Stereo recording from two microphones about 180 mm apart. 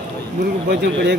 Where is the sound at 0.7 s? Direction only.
70° right (ahead or behind).